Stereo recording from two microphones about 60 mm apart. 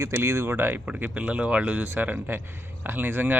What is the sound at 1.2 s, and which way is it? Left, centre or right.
Speech, right.